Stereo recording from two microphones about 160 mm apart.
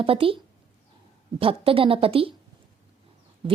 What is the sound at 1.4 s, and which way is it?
Speech, 35° right (ahead or behind).